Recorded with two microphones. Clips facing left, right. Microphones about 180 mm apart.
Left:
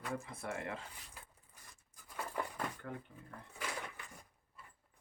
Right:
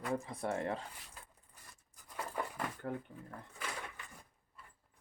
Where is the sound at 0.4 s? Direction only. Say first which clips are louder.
Right 6 dB; 40° right (ahead or behind).